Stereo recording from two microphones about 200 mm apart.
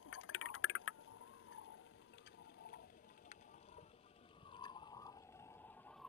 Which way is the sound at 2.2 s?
55° left (ahead or behind).